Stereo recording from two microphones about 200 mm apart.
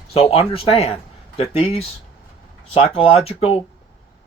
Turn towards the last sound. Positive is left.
turn(degrees=30)  # may be behind; listen again after turning